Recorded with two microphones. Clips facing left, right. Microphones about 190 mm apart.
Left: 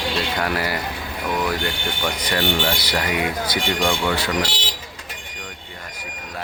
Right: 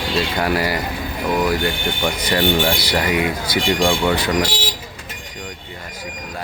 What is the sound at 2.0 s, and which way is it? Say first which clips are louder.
Speech: right 4 dB; 10° right (ahead or behind).